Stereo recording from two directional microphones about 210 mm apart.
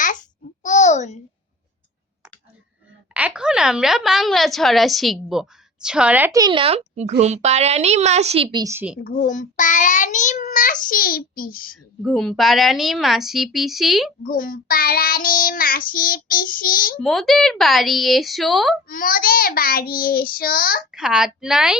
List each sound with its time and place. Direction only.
0.0 s a sound: 35° left (ahead or behind)
3.2 s a woman's voice: 5° right (ahead or behind); by 8.6 s 30° right (ahead or behind)
8.6 s a woman's voice: 10° right (ahead or behind)
9.0 s child singing: 40° left (ahead or behind)
12.0 s a woman's voice: centre (ahead or behind)
14.3 s child singing: 40° left (ahead or behind)
17.0 s a woman's voice: centre (ahead or behind)
18.9 s child singing: 45° left (ahead or behind)
20.9 s a woman's voice: 5° right (ahead or behind)